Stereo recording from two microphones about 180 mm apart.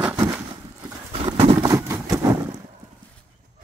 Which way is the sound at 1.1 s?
35° right (ahead or behind).